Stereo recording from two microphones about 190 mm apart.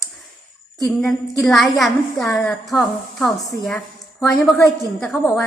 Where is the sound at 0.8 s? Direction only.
Centre (ahead or behind).